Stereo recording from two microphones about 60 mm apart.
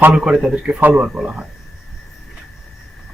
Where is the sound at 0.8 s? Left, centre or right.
Right.